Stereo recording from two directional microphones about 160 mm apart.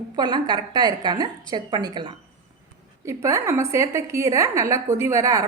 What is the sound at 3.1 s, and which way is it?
A woman's voice, 20° right (ahead or behind).